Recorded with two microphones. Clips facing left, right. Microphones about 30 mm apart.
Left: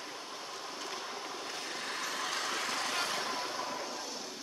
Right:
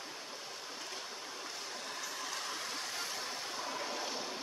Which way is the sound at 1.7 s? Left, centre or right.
Left.